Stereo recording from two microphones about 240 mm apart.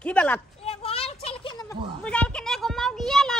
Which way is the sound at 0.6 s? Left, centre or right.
Left.